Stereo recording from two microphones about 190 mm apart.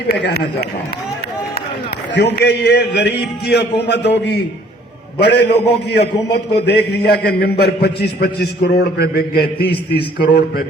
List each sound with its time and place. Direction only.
0.1 s a man's voice: 60° left (ahead or behind)
2.1 s a man's voice: 60° left (ahead or behind)